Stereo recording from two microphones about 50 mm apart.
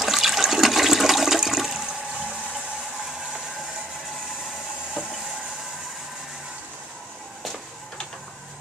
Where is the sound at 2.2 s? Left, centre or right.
Centre.